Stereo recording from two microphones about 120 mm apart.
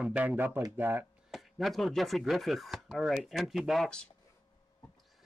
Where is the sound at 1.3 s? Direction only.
Centre (ahead or behind).